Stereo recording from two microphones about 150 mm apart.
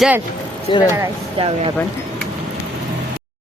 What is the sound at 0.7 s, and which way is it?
Speech, 35° left (ahead or behind).